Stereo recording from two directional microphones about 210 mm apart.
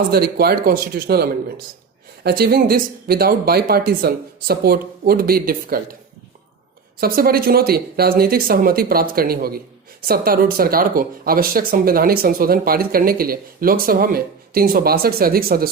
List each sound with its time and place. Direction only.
0.1 s speech: 45° right (ahead or behind)
7.0 s speech: 45° right (ahead or behind)